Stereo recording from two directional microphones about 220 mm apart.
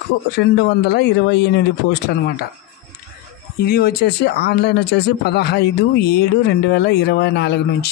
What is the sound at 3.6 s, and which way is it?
Speech, 45° left (ahead or behind).